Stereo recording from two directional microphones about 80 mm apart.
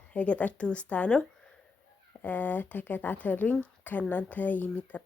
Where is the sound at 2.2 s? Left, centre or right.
Left.